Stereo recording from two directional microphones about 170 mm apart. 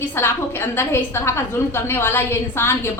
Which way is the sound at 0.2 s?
15° left (ahead or behind).